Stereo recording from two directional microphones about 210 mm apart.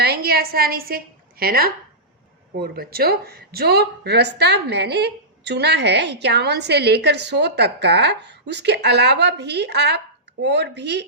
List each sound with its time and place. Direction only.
0.0 s a woman's voice: 50° right (ahead or behind)